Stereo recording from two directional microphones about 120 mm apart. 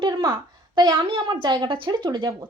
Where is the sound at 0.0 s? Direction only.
35° right (ahead or behind).